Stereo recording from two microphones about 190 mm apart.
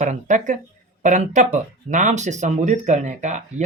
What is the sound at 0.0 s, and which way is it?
Speech, 40° right (ahead or behind).